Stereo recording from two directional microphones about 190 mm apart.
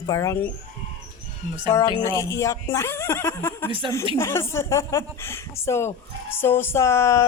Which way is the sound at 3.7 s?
25° right (ahead or behind).